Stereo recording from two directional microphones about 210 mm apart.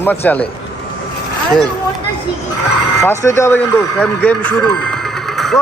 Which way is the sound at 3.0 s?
15° left (ahead or behind).